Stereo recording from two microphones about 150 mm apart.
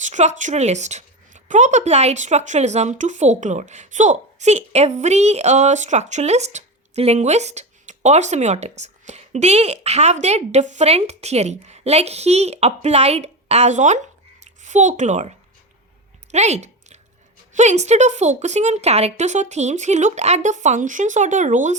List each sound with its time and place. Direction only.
0.0 s a woman's voice: 50° right (ahead or behind)
16.3 s a sound: 50° right (ahead or behind)
17.5 s a woman's voice: 50° right (ahead or behind)